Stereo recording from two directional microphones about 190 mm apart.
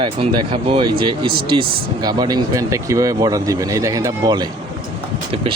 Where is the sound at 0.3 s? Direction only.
25° right (ahead or behind).